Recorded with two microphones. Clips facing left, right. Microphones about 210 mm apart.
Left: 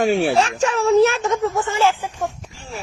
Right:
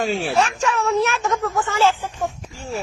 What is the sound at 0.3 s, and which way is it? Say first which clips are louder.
Speech: left 2 dB; 30° left (ahead or behind).